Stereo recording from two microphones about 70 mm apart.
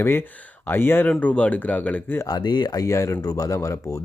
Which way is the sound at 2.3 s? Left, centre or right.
Left.